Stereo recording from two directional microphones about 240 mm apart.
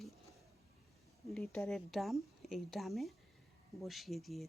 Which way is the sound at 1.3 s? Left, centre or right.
Centre.